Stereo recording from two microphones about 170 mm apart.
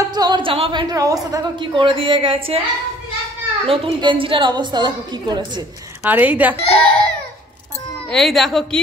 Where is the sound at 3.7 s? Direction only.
30° right (ahead or behind).